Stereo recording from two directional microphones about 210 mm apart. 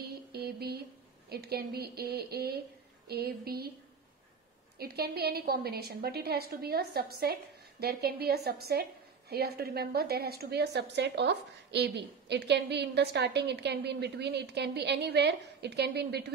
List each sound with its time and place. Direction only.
0.3 s music: 50° right (ahead or behind)
1.3 s a woman's voice: 50° right (ahead or behind)
4.7 s a woman's voice: 50° right (ahead or behind)